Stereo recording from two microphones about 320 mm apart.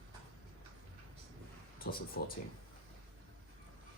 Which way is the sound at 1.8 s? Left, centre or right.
Left.